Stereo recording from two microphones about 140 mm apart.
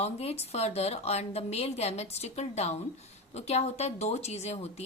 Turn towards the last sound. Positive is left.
turn(degrees=50)  # may be behind; listen again after turning